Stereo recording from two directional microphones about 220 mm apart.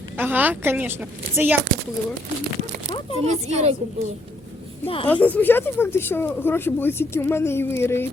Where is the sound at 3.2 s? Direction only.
30° right (ahead or behind).